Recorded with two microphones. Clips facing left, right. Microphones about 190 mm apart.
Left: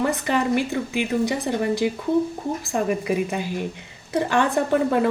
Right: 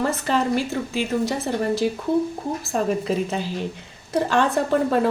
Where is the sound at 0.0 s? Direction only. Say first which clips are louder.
Even; 15° left (ahead or behind).